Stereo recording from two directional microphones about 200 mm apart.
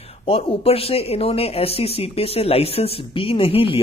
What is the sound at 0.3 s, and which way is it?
Speech, 30° left (ahead or behind).